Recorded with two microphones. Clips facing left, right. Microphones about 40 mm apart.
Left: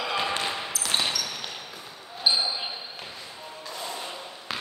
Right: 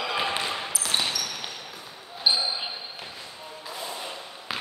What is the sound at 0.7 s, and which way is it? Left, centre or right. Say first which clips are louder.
Basketball bounce: left 1 dB; centre.